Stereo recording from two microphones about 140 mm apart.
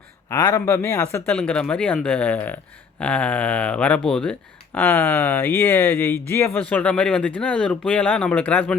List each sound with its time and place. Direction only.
0.3 s a man's voice: 20° left (ahead or behind)
1.3 s speech: 5° left (ahead or behind)